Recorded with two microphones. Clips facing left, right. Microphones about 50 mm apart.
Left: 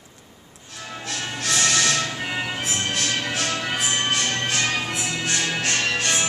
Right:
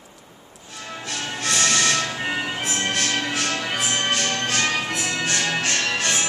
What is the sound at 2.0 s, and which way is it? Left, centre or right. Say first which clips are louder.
Music: right 1 dB; centre.